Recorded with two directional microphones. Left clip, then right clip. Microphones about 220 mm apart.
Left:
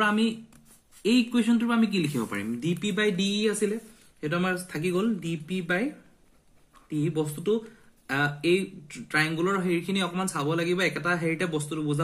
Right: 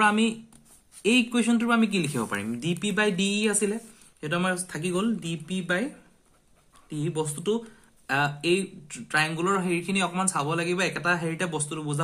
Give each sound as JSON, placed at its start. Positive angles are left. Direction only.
{"t": 1.0, "sound": "speech", "side_deg": -35}
{"t": 6.9, "sound": "speech", "side_deg": -40}